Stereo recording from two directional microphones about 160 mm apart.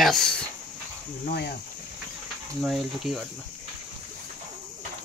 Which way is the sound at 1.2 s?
90° left.